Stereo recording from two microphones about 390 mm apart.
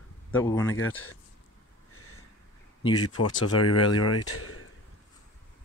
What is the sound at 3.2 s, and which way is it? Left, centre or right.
Speech, left.